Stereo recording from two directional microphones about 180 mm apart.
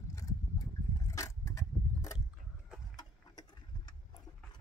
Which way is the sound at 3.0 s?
20° left (ahead or behind).